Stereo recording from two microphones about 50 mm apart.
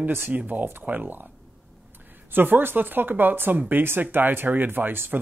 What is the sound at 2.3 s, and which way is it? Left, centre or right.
Speech, right.